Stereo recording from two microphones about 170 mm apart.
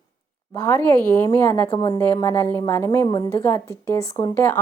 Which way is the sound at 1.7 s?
25° left (ahead or behind).